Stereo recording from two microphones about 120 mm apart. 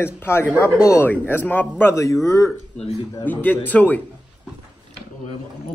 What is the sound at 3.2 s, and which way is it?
Speech, 15° left (ahead or behind).